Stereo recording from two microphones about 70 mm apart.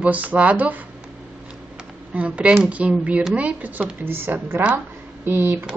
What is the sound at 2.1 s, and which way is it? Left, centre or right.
A woman's voice, centre.